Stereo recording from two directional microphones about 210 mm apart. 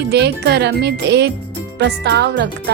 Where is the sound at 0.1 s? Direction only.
50° right (ahead or behind).